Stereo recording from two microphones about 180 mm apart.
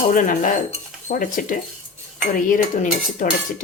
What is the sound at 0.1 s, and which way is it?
Dishes, 45° left (ahead or behind).